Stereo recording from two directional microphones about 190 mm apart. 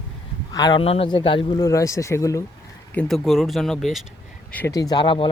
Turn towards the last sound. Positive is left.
turn(degrees=25)  # may be behind; listen again after turning